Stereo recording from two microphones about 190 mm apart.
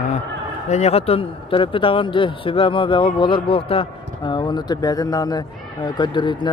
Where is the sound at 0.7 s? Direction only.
35° left (ahead or behind).